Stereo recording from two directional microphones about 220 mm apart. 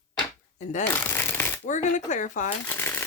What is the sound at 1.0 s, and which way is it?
Shuffling cards, 10° left (ahead or behind).